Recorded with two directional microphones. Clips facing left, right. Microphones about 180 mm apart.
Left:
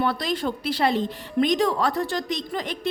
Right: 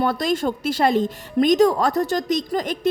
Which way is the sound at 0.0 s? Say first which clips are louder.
Right 4 dB; 45° right (ahead or behind).